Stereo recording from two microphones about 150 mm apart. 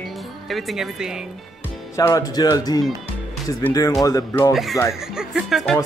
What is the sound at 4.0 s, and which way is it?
Speech, 20° left (ahead or behind).